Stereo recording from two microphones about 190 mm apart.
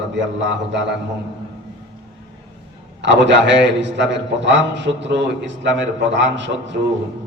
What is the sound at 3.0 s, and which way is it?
Speech, 70° right (ahead or behind).